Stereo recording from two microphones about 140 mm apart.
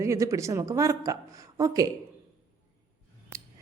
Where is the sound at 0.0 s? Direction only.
20° right (ahead or behind).